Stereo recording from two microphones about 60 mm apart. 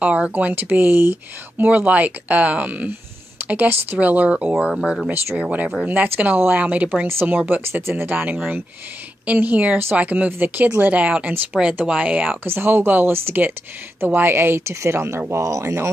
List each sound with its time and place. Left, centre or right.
0.0 s speech: right
5.1 s speech: right
7.1 s speech: right
12.4 s speech: right
14.7 s speech: right